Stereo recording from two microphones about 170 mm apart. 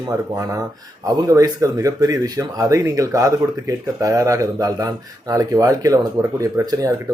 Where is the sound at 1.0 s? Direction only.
20° right (ahead or behind).